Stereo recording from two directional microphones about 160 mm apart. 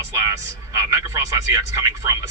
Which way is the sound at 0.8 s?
20° right (ahead or behind).